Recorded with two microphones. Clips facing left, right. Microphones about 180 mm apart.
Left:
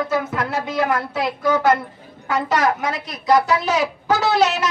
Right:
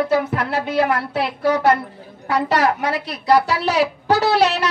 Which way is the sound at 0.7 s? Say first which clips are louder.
Right 2 dB; 30° right (ahead or behind).